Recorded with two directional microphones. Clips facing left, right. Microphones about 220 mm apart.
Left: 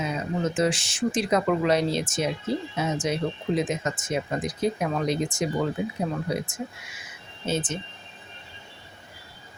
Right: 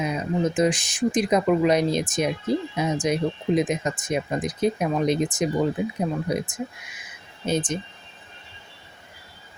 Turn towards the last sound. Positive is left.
turn(degrees=-15)  # may be behind; listen again after turning